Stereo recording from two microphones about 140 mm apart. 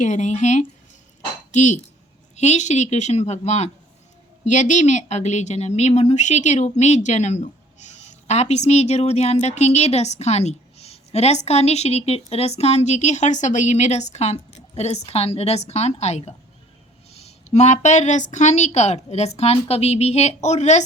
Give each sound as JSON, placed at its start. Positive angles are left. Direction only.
{"t": 0.0, "sound": "a woman's voice", "side_deg": 60}